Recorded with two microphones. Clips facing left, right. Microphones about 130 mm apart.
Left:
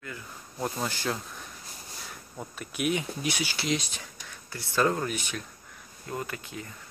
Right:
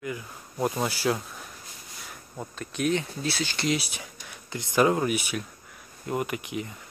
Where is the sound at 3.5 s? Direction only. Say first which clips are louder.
Right 2 dB; 5° right (ahead or behind).